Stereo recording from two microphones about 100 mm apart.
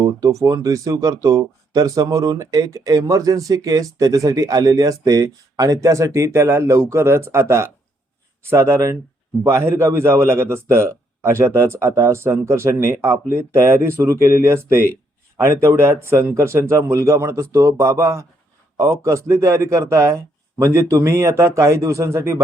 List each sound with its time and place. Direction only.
0.0 s a man's voice: 35° right (ahead or behind)